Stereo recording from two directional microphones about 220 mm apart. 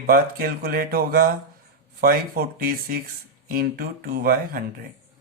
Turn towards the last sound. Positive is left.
turn(degrees=-40)  # may be behind; listen again after turning